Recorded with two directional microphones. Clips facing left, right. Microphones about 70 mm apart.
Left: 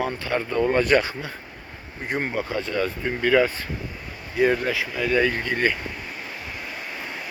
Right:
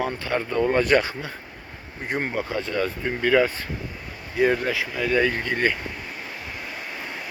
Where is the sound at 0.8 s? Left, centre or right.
Right.